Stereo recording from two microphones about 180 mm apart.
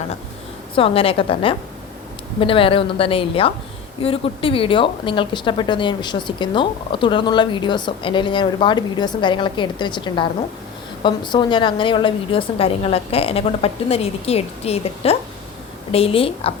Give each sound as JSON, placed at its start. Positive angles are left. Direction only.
{"t": 0.8, "sound": "a woman's voice", "side_deg": 30}